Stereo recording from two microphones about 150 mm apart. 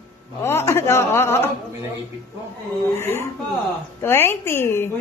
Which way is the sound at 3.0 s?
15° left (ahead or behind).